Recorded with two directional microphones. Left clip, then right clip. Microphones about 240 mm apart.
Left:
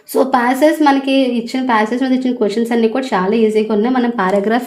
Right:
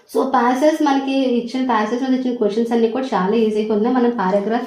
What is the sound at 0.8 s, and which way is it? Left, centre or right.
Speech, left.